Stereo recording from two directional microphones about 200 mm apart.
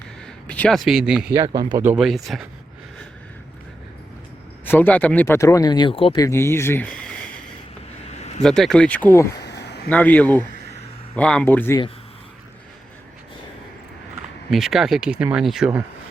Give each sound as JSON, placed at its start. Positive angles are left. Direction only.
{"t": 0.4, "sound": "speech", "side_deg": 5}
{"t": 1.4, "sound": "speech", "side_deg": -20}
{"t": 1.8, "sound": "speech", "side_deg": -5}
{"t": 4.6, "sound": "speech", "side_deg": 10}
{"t": 6.2, "sound": "speech", "side_deg": 15}
{"t": 8.4, "sound": "speech", "side_deg": 0}
{"t": 9.4, "sound": "a sound", "side_deg": 60}
{"t": 9.9, "sound": "speech", "side_deg": 10}
{"t": 14.5, "sound": "speech", "side_deg": 0}